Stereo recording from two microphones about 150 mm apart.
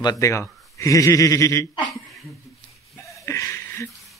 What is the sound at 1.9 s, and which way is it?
Speech, centre (ahead or behind).